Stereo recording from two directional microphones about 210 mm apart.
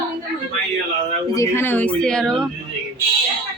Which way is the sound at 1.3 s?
15° left (ahead or behind).